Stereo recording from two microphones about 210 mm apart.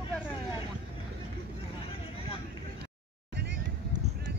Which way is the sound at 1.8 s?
25° left (ahead or behind).